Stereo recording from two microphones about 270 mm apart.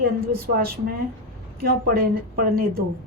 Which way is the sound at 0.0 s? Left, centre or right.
Right.